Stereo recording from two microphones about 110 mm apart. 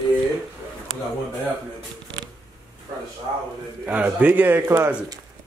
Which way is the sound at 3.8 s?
15° right (ahead or behind).